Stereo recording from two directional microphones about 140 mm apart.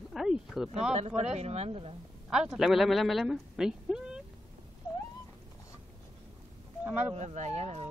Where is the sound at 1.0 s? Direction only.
50° right (ahead or behind).